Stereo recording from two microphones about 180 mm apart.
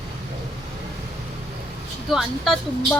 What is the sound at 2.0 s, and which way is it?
Speech, centre (ahead or behind).